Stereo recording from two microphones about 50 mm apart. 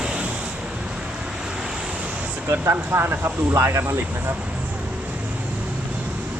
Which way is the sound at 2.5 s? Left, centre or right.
Right.